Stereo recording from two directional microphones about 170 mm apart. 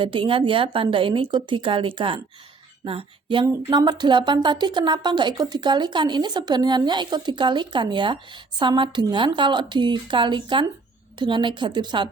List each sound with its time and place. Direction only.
0.0 s a woman's voice: 30° right (ahead or behind)